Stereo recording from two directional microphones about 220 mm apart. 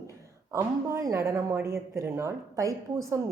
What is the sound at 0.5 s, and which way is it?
Speech, 15° right (ahead or behind).